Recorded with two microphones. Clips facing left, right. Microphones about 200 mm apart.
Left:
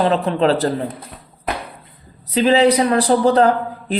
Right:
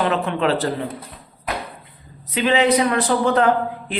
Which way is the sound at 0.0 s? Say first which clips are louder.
Left 4 dB; 35° left (ahead or behind).